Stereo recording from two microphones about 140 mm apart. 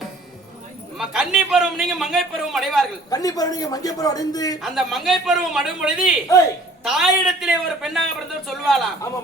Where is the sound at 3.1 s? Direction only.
25° left (ahead or behind).